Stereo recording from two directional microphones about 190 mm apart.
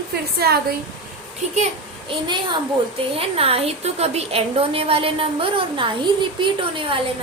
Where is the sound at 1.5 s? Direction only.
30° right (ahead or behind).